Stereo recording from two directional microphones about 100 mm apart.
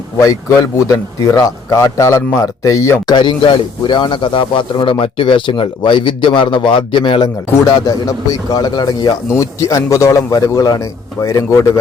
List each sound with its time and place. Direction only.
0.2 s a man's voice: 30° left (ahead or behind)
3.1 s speech: 50° left (ahead or behind)
7.7 s a man's voice: 40° left (ahead or behind)